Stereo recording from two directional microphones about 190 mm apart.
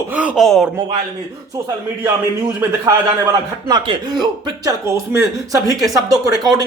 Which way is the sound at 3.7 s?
20° right (ahead or behind).